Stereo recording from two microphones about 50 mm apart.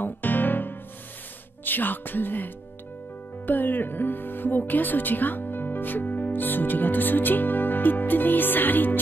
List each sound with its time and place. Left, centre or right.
0.0 s music: left
1.6 s speech: left